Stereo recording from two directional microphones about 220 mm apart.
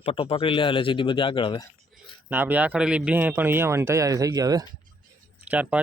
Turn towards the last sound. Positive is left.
turn(degrees=-5)  # may be behind; listen again after turning